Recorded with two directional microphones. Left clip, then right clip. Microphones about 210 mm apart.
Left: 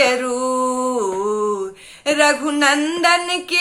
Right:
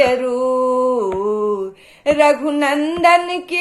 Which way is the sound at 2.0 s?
10° left (ahead or behind).